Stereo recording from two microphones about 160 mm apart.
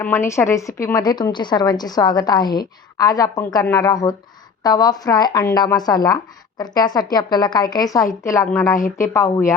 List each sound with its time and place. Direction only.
0.0 s a woman's voice: 15° left (ahead or behind)